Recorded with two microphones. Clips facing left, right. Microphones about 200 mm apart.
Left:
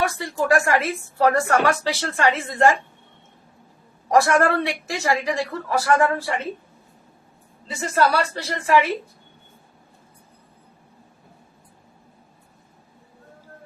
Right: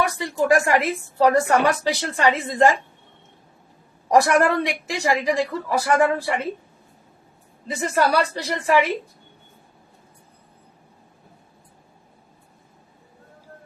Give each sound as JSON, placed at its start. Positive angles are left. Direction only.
{"t": 0.1, "sound": "a woman's voice", "side_deg": -15}
{"t": 4.1, "sound": "a woman's voice", "side_deg": -15}
{"t": 7.8, "sound": "a woman's voice", "side_deg": -15}